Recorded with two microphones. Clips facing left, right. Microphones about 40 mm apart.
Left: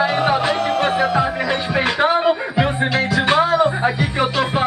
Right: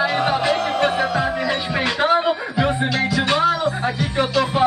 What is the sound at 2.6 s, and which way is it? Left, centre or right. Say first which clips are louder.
Music: left 1 dB; centre.